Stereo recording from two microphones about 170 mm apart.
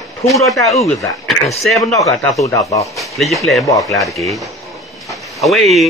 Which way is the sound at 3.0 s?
Centre (ahead or behind).